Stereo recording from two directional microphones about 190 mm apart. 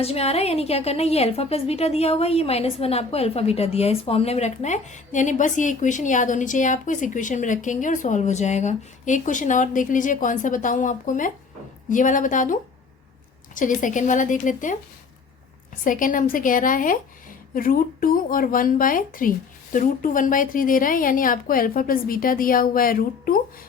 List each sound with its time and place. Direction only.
0.0 s a woman's voice: 30° left (ahead or behind)
15.8 s a woman's voice: 45° left (ahead or behind)